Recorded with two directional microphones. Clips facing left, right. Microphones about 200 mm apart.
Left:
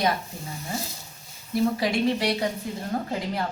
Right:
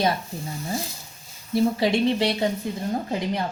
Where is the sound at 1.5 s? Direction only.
25° right (ahead or behind).